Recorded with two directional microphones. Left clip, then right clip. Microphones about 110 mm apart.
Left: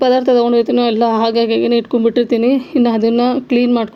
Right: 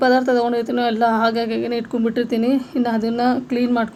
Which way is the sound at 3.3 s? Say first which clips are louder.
Left 5 dB; 35° right (ahead or behind).